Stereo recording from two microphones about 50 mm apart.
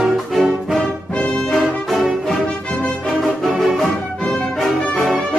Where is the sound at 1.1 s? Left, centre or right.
Left.